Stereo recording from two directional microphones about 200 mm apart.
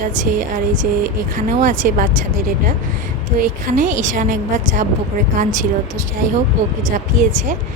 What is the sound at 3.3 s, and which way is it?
A woman's voice, 40° right (ahead or behind).